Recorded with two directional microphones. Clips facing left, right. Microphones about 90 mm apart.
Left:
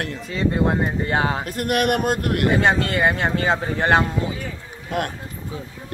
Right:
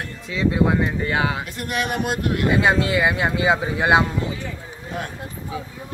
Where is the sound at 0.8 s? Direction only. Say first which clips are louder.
Left 1 dB; 40° left (ahead or behind).